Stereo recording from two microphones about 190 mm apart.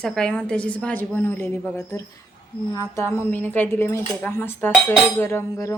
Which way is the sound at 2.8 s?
15° left (ahead or behind).